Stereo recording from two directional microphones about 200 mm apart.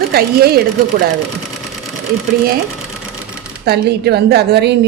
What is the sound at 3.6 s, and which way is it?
A woman's voice, 55° right (ahead or behind).